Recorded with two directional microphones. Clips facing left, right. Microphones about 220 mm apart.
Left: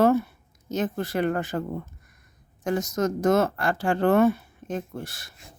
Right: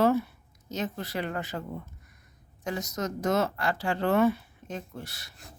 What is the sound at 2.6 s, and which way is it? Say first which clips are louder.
Speech: left 7 dB; 50° left (ahead or behind).